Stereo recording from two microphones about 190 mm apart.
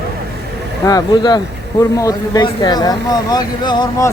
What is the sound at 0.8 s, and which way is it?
Speech, 20° left (ahead or behind).